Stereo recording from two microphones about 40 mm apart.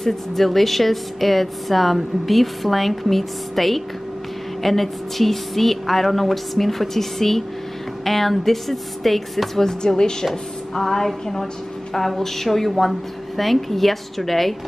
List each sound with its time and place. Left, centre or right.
0.0 s a woman's voice: centre
9.7 s a woman's voice: centre